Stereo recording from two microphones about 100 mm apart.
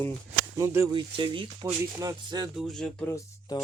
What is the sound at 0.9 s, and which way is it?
Speech, 55° right (ahead or behind).